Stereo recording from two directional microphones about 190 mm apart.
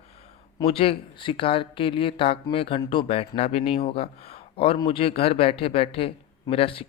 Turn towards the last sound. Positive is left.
turn(degrees=30)  # may be behind; listen again after turning